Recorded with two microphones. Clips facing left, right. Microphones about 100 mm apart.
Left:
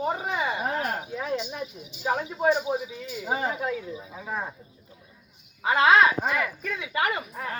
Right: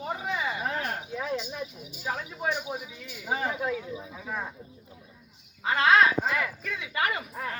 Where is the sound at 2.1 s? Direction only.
30° left (ahead or behind).